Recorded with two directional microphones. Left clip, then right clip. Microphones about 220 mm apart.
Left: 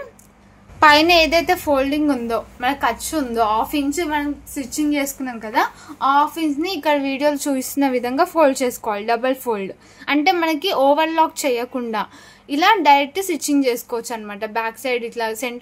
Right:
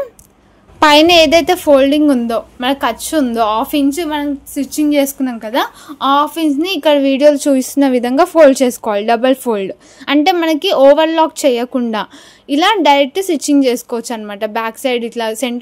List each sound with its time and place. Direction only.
0.7 s a woman's voice: 35° right (ahead or behind)